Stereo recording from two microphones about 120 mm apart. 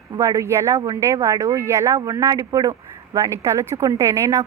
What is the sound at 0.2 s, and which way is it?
A woman's voice, 25° right (ahead or behind).